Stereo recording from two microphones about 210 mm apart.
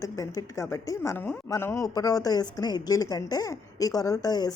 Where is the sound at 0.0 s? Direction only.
15° left (ahead or behind).